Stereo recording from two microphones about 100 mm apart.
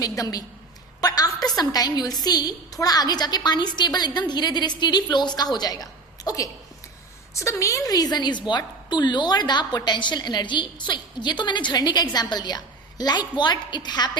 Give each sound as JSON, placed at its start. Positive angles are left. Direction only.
{"t": 0.0, "sound": "a woman's voice", "side_deg": 40}